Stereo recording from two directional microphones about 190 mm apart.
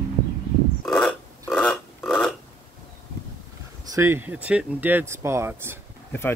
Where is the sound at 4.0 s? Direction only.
10° right (ahead or behind).